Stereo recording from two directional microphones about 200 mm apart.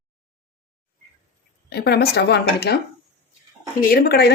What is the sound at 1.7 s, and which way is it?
Speech, 55° left (ahead or behind).